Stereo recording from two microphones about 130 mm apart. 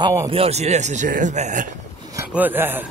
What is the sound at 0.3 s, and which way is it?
A man's voice, 50° right (ahead or behind).